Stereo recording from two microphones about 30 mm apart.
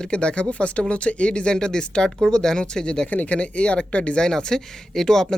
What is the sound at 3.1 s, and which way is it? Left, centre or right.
Speech, left.